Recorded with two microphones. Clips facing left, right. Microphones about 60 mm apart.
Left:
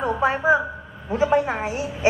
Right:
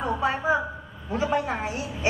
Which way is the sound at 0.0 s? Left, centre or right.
Left.